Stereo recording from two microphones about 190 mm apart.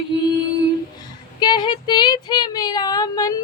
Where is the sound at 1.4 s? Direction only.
20° left (ahead or behind).